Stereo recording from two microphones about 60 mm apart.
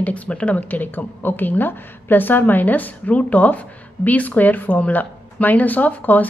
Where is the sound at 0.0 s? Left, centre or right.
Left.